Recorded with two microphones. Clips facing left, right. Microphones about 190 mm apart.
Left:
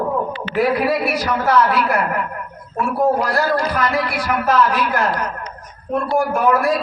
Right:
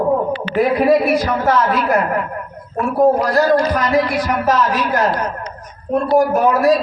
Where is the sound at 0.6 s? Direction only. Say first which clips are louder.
Right 4 dB; 45° right (ahead or behind).